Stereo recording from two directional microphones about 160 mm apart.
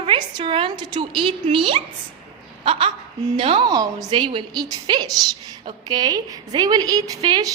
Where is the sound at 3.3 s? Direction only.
35° right (ahead or behind).